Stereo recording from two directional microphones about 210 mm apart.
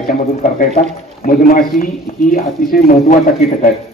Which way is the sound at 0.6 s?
40° left (ahead or behind).